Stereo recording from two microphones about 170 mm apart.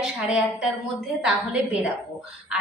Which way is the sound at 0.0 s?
Centre (ahead or behind).